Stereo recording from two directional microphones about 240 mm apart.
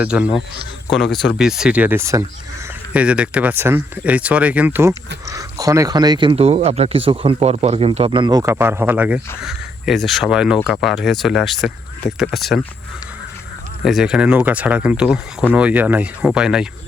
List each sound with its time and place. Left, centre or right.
0.0 s speech: centre
13.8 s speech: centre